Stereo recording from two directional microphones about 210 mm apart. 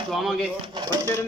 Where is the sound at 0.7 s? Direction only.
20° right (ahead or behind).